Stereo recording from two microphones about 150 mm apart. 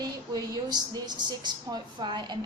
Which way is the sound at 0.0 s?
25° right (ahead or behind).